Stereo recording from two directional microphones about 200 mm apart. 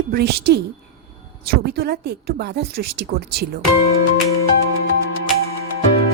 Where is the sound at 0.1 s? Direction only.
55° right (ahead or behind).